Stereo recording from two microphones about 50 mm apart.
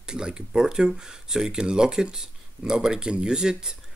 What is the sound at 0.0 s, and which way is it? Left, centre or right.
Speech, centre.